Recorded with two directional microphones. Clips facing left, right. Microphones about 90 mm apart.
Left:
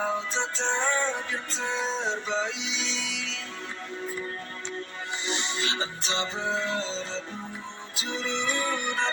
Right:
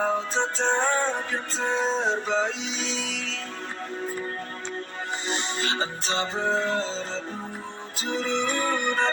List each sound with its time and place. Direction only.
0.0 s music: 40° right (ahead or behind)
5.3 s music: 40° right (ahead or behind)